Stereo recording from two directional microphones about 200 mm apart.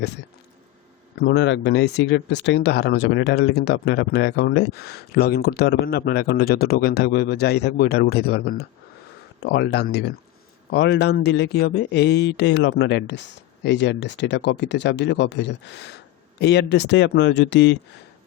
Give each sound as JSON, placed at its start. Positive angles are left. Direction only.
{"t": 1.2, "sound": "speech", "side_deg": 60}